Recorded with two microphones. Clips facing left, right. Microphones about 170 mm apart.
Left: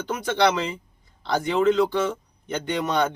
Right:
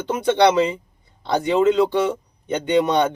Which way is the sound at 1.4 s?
20° right (ahead or behind).